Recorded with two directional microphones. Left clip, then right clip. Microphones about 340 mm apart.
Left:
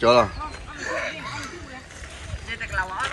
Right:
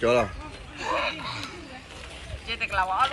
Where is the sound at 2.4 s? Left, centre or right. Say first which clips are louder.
Right 2 dB; centre.